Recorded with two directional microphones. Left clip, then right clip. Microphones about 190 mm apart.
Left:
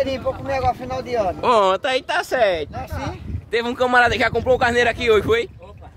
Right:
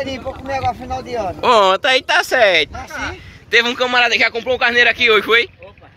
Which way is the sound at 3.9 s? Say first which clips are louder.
Left 2 dB; 35° left (ahead or behind).